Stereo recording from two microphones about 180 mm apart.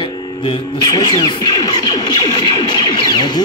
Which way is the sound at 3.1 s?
25° left (ahead or behind).